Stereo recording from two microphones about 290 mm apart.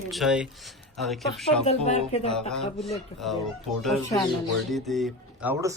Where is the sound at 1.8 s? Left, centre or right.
Left.